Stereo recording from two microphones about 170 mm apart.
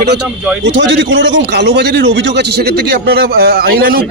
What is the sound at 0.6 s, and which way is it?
A man's voice, 90° right.